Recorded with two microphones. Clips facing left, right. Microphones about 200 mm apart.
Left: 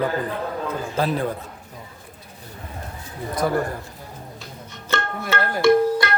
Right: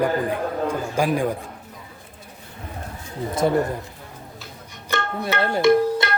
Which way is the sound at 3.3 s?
25° right (ahead or behind).